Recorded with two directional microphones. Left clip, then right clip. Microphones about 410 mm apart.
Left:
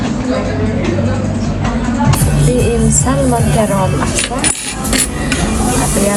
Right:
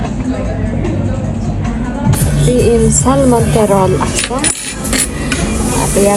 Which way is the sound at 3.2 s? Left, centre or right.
Centre.